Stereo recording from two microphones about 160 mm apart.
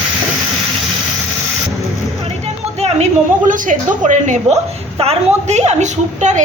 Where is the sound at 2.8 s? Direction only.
50° right (ahead or behind).